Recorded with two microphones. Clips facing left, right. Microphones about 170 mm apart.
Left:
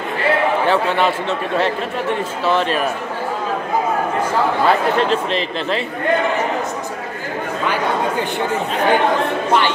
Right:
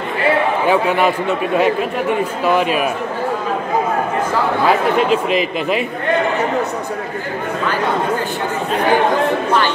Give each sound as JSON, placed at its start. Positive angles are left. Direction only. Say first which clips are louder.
{"t": 0.7, "sound": "speech", "louder": "right 5 dB", "side_deg": -10}
{"t": 2.4, "sound": "speech", "louder": "right 1 dB", "side_deg": -10}
{"t": 4.6, "sound": "speech", "louder": "right 3 dB", "side_deg": -5}